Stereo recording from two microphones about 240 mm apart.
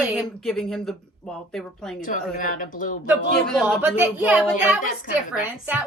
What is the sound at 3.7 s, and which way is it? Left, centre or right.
A woman's voice, centre.